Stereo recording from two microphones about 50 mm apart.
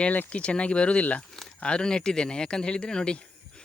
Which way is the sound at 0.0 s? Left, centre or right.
Left.